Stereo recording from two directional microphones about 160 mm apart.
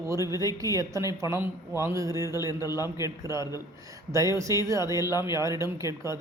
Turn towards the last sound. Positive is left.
turn(degrees=-20)  # may be behind; listen again after turning